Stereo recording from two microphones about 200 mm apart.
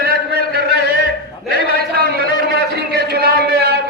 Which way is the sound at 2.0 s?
50° right (ahead or behind).